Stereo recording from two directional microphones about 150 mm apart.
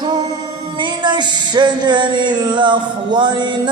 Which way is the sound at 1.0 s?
30° right (ahead or behind).